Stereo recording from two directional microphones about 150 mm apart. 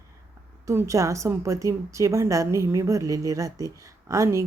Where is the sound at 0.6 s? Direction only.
20° right (ahead or behind).